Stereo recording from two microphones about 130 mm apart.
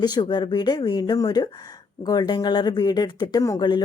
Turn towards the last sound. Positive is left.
turn(degrees=35)  # may be behind; listen again after turning